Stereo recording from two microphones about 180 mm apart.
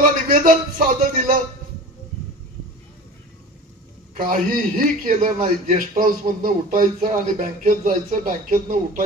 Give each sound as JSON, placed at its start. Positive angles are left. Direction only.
{"t": 0.3, "sound": "a man's voice", "side_deg": -50}
{"t": 4.2, "sound": "a man's voice", "side_deg": -50}